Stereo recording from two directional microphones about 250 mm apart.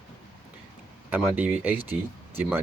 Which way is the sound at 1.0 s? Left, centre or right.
Centre.